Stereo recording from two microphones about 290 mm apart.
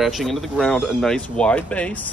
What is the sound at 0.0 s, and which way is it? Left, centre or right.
Speech, centre.